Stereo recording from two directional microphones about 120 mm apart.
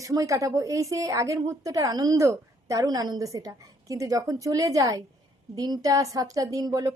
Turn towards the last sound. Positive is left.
turn(degrees=-30)  # may be behind; listen again after turning